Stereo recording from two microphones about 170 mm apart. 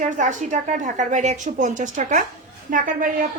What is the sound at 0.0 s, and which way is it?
A woman's voice, 45° right (ahead or behind).